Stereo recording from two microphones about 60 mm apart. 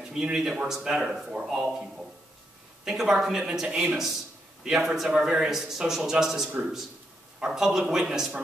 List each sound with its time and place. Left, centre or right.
0.0 s a man's voice: centre
2.8 s speech: centre
4.7 s a man's voice: centre